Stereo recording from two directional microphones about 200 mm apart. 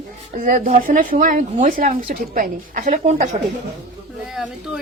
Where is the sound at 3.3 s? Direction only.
30° right (ahead or behind).